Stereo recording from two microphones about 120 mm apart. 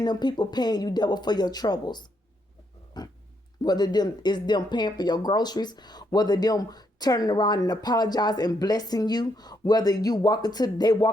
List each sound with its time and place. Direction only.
0.0 s speech: 35° left (ahead or behind)
3.0 s a sound: 35° left (ahead or behind)
3.6 s speech: 35° left (ahead or behind)